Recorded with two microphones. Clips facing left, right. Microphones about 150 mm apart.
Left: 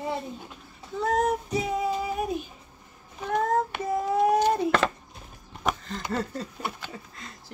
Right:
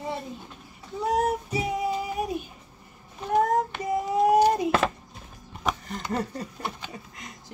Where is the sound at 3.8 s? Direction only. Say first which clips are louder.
Even; 15° right (ahead or behind).